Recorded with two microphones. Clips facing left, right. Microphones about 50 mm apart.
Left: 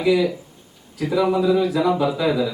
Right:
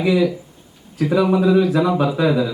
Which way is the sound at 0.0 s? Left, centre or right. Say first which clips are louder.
Right 1 dB; right.